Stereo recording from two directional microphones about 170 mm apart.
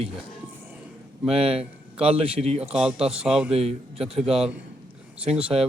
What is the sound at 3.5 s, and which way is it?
Speech, 35° right (ahead or behind).